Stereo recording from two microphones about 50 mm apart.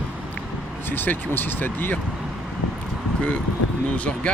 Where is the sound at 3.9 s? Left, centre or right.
Left.